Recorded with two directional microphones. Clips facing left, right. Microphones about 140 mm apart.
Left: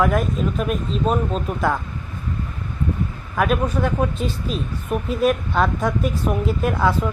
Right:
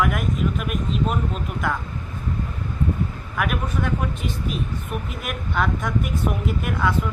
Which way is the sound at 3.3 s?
25° left (ahead or behind).